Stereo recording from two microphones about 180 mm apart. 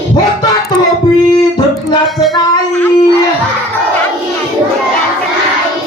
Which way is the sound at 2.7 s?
10° left (ahead or behind).